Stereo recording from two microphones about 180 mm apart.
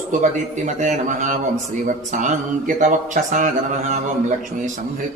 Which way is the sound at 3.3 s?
45° right (ahead or behind).